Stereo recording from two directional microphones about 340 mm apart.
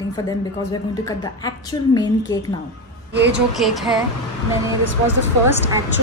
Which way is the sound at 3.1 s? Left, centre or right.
Right.